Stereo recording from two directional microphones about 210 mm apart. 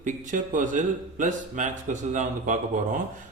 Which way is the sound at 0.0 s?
35° right (ahead or behind).